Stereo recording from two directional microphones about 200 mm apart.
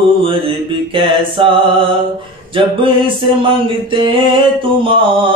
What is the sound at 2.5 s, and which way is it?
Music, 25° right (ahead or behind).